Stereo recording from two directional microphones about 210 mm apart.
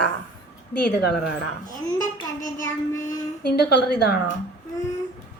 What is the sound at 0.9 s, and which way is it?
Speech, 50° left (ahead or behind).